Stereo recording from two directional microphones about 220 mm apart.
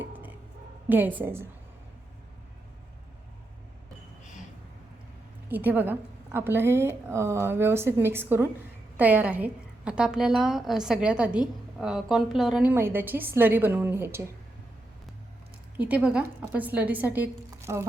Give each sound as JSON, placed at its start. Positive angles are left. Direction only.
{"t": 0.9, "sound": "a woman's voice", "side_deg": -10}
{"t": 5.5, "sound": "a woman's voice", "side_deg": -10}
{"t": 15.8, "sound": "a woman's voice", "side_deg": -5}